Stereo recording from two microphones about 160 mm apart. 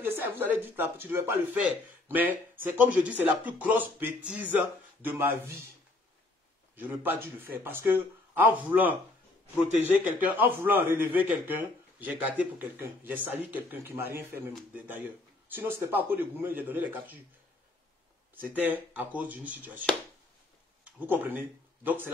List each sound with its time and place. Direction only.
0.0 s a man's voice: 10° right (ahead or behind)
6.8 s a man's voice: 10° right (ahead or behind)
18.3 s a man's voice: 10° right (ahead or behind)
20.8 s speech: 10° right (ahead or behind)